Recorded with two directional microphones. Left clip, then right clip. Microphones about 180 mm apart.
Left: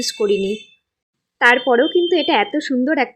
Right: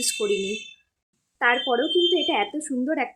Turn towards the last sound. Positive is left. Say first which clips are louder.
# left 8 dB
turn(degrees=25)  # may be behind; listen again after turning